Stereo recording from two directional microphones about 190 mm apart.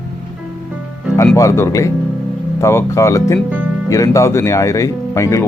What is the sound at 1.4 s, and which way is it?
Speech, 15° left (ahead or behind).